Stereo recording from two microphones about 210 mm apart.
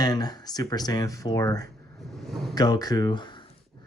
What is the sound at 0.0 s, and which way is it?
Speech, 20° left (ahead or behind).